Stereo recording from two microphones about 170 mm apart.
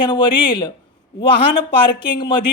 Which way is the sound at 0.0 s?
30° left (ahead or behind).